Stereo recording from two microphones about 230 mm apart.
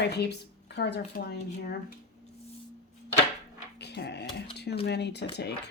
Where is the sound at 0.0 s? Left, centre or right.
Left.